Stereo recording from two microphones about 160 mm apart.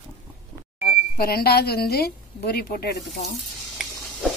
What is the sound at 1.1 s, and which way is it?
Speech, 75° left (ahead or behind).